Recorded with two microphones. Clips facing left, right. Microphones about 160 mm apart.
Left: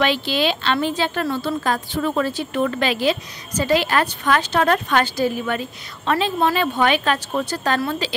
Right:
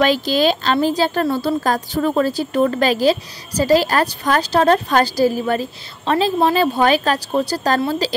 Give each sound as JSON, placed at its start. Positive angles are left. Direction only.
{"t": 0.0, "sound": "a woman's voice", "side_deg": -40}